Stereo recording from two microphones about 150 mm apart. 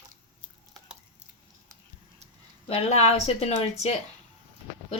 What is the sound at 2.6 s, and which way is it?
A woman's voice, 45° left (ahead or behind).